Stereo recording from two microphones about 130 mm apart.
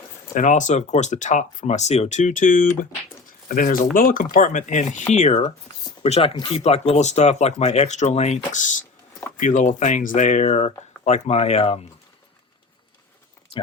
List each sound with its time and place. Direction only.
0.3 s speech: 75° left (ahead or behind)
6.0 s speech: 50° left (ahead or behind)
13.5 s a sound: 40° left (ahead or behind)